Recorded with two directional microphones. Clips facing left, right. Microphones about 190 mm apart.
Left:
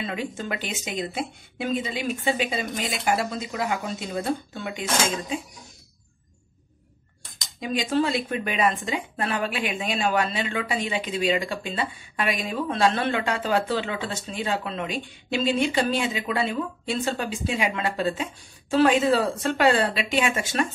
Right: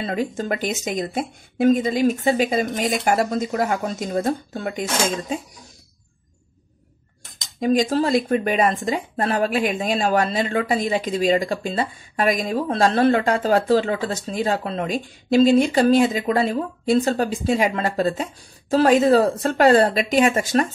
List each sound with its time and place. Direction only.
0.0 s speech: 40° right (ahead or behind)
7.6 s speech: 40° right (ahead or behind)